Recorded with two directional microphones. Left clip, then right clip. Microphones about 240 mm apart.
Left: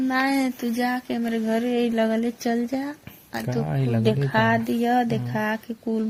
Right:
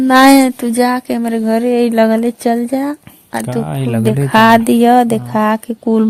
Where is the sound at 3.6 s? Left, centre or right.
Right.